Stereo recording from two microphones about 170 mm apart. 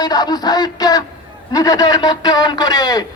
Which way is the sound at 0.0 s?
25° left (ahead or behind).